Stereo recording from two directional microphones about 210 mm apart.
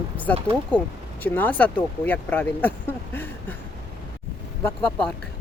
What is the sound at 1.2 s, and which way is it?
Speech, 10° left (ahead or behind).